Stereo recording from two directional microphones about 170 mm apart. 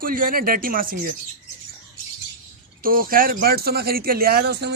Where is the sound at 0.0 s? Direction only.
55° right (ahead or behind).